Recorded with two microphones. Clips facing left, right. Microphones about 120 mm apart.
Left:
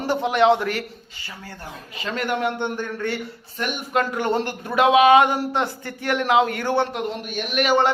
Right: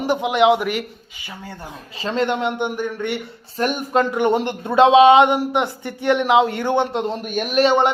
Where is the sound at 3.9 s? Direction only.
20° right (ahead or behind).